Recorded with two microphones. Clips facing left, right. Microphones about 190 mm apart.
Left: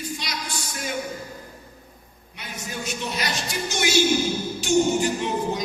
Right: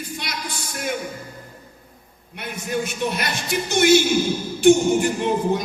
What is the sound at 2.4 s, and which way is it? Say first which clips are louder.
A man's voice: right 8 dB; 55° right (ahead or behind).